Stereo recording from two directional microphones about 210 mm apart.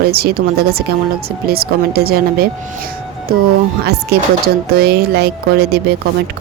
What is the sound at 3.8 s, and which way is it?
Speech, 50° right (ahead or behind).